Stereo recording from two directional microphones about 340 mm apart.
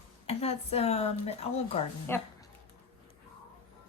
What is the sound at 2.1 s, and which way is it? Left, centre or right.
Speech, centre.